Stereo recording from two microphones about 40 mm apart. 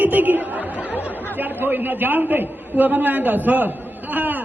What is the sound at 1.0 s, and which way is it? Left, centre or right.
A woman's voice, right.